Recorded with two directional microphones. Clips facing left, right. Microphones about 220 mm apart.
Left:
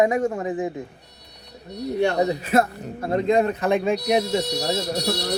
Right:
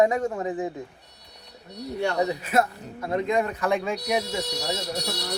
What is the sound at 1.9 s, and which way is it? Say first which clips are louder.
Speech: left 4 dB; 25° left (ahead or behind).